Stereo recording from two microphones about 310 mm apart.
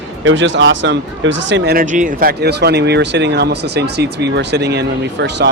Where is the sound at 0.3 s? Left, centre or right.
Right.